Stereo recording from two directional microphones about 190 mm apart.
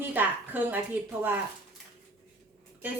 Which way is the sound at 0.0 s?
10° right (ahead or behind).